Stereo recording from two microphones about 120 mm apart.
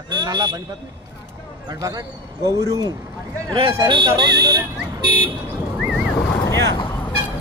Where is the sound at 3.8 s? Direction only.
40° right (ahead or behind).